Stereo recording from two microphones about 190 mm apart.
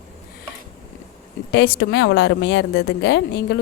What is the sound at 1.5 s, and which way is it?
A woman's voice, 65° left (ahead or behind).